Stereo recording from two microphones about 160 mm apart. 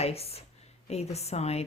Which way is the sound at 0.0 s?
40° left (ahead or behind).